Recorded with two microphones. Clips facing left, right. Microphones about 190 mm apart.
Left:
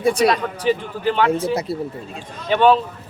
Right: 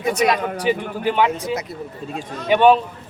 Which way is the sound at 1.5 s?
30° left (ahead or behind).